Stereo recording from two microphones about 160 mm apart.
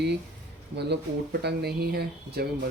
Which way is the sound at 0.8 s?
90° right.